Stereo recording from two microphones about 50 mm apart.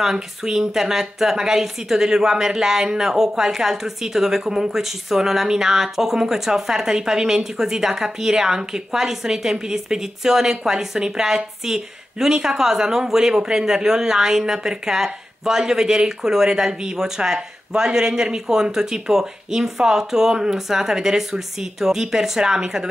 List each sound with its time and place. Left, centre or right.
0.0 s a woman's voice: centre